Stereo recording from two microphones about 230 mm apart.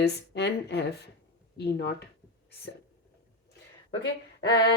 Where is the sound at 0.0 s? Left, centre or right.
Left.